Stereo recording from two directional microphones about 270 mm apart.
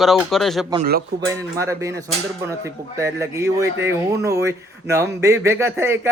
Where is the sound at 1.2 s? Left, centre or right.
Centre.